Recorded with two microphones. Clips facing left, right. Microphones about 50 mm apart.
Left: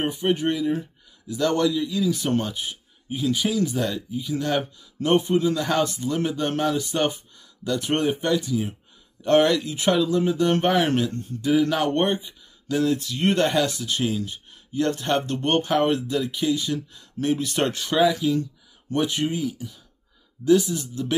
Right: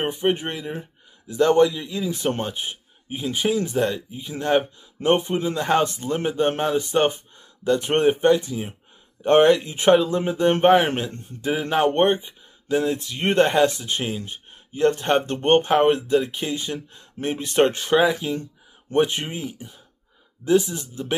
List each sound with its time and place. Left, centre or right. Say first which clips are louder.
0.0 s speech: even; right